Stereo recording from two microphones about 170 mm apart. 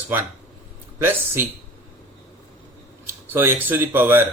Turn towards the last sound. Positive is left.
turn(degrees=-10)  # may be behind; listen again after turning